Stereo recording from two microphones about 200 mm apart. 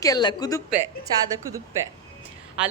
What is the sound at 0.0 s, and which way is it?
Speech, 20° left (ahead or behind).